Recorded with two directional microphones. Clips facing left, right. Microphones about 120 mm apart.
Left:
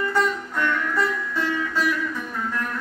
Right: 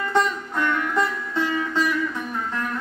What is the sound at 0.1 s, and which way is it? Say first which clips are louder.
Music: right 1 dB; 20° right (ahead or behind).